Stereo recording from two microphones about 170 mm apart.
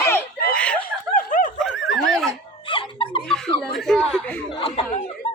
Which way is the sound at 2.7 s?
30° left (ahead or behind).